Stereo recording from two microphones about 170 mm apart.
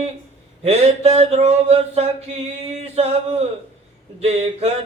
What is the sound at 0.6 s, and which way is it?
Mantra, 40° right (ahead or behind).